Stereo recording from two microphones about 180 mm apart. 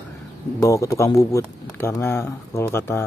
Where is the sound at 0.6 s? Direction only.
15° left (ahead or behind).